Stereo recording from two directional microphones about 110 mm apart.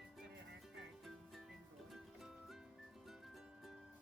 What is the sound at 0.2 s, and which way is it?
Music, centre (ahead or behind).